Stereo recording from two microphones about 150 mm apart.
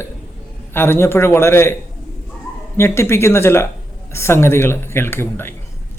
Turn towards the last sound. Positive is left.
turn(degrees=15)  # may be behind; listen again after turning